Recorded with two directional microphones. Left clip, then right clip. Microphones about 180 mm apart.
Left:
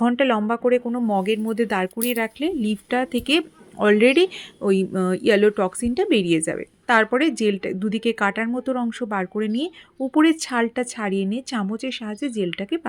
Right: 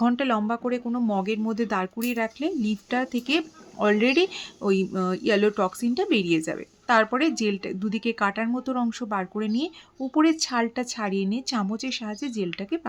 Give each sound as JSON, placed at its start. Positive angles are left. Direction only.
{"t": 0.0, "sound": "speech", "side_deg": 10}